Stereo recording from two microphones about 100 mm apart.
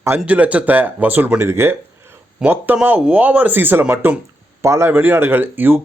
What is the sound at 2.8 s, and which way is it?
Speech, 15° right (ahead or behind).